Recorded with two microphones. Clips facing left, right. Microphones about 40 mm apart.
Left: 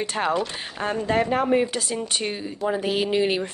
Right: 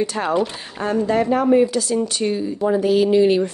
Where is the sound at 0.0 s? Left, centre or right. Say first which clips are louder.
Right 4 dB; left.